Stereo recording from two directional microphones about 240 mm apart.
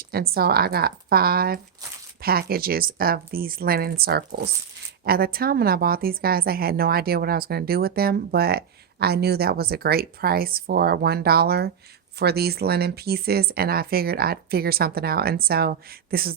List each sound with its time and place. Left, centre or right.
0.0 s a woman's voice: right